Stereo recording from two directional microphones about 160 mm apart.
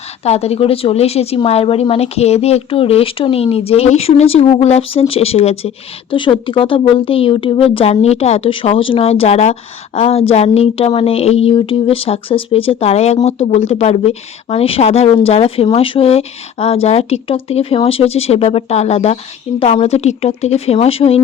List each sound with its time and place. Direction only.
0.3 s speech: 40° left (ahead or behind)